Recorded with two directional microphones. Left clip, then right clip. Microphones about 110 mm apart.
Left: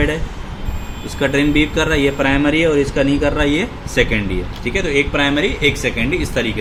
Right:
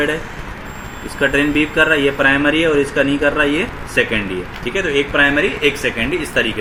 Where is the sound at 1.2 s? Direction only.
25° left (ahead or behind).